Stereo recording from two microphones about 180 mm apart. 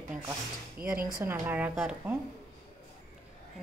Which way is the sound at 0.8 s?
55° right (ahead or behind).